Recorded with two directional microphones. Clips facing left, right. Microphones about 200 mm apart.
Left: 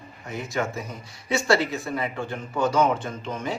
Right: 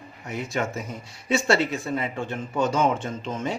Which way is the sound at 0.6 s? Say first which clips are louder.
Even; 25° right (ahead or behind).